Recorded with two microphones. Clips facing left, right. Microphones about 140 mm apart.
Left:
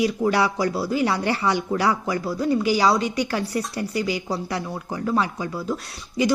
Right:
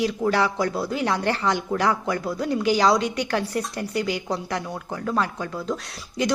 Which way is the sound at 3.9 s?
60° right (ahead or behind).